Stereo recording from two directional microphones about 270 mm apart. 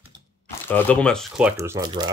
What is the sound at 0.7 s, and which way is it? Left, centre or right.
Speech, centre.